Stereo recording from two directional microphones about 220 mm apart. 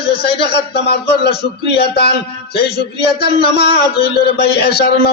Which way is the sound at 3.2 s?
45° left (ahead or behind).